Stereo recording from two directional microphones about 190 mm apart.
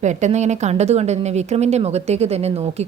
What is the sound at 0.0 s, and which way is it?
Speech, 40° right (ahead or behind).